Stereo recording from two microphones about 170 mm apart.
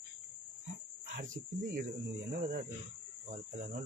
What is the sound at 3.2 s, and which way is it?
Speech, 45° right (ahead or behind).